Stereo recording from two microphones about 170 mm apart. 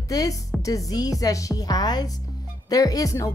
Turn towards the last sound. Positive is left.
turn(degrees=20)  # may be behind; listen again after turning